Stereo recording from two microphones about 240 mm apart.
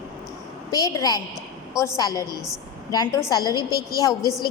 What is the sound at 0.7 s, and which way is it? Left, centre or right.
A woman's voice, centre.